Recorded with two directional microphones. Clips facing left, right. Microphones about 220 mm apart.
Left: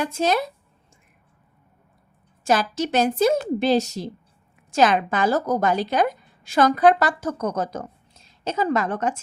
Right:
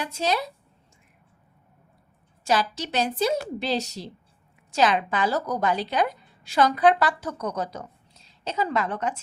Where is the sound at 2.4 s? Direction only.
50° left (ahead or behind).